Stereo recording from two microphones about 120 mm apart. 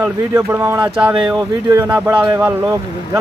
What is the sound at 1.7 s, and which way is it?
Speech, 25° right (ahead or behind).